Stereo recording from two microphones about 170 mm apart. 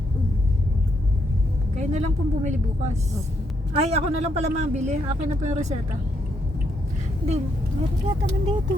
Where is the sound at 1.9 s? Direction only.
45° right (ahead or behind).